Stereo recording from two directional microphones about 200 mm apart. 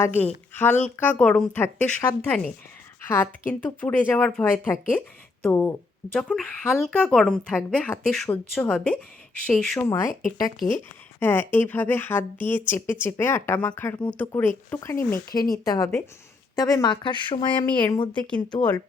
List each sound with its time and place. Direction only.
0.0 s speech: 10° left (ahead or behind)
9.8 s speech: 15° left (ahead or behind)
11.2 s speech: 10° left (ahead or behind)
18.1 s speech: 5° left (ahead or behind)